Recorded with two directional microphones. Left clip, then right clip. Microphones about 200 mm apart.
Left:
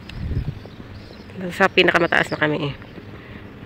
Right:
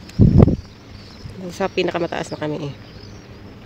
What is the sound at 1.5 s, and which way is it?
Speech, 5° right (ahead or behind).